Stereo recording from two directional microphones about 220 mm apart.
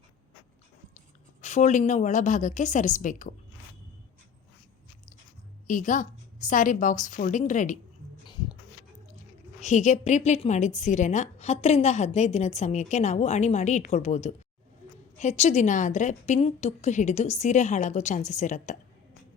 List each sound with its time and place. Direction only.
1.4 s a woman's voice: 30° left (ahead or behind)
5.6 s a woman's voice: 35° left (ahead or behind)
8.2 s a sound: 20° left (ahead or behind)
9.6 s a woman's voice: 30° left (ahead or behind)